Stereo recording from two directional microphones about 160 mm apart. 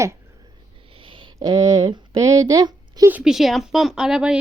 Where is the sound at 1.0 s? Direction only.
30° right (ahead or behind).